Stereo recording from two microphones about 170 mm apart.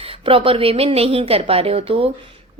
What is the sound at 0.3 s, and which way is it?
A woman's voice, 30° right (ahead or behind).